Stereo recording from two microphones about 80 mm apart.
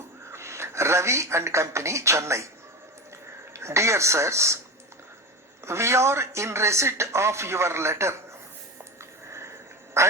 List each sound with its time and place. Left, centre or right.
0.3 s speech: right
3.5 s speech: right
5.6 s speech: right
10.0 s quack: right